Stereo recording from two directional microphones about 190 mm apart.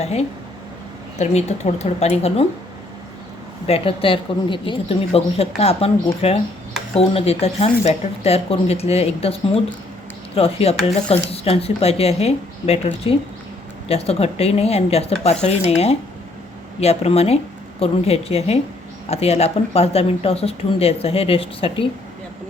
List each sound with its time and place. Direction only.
0.0 s speech: 35° left (ahead or behind)
3.7 s a woman's voice: 30° left (ahead or behind)
10.3 s speech: 30° left (ahead or behind)